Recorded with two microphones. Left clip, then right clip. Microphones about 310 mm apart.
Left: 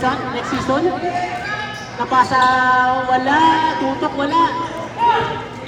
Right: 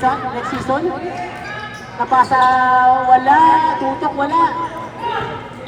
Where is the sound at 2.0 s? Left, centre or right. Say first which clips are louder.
Right 2 dB; centre.